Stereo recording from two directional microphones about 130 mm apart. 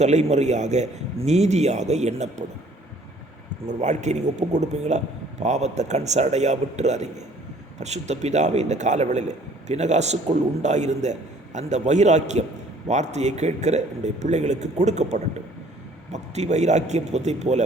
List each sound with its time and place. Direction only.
0.0 s a man's voice: 60° right (ahead or behind)
3.7 s a man's voice: 65° right (ahead or behind)